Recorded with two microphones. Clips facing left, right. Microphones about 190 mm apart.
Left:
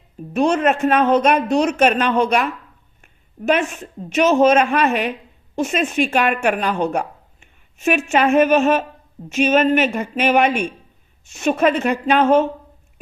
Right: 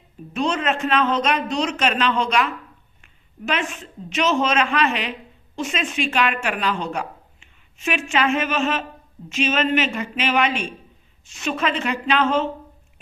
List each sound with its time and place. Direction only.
0.3 s a man's voice: 50° left (ahead or behind)